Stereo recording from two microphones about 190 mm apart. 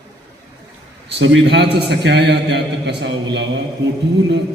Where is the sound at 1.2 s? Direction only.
70° right (ahead or behind).